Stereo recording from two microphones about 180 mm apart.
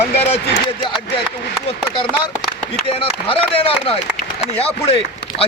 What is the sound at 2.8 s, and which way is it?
Speech, 30° left (ahead or behind).